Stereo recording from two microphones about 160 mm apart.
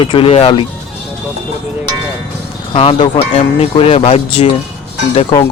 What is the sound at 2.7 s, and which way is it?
Speech, 35° left (ahead or behind).